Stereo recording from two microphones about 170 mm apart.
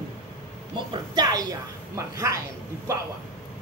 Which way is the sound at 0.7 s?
25° right (ahead or behind).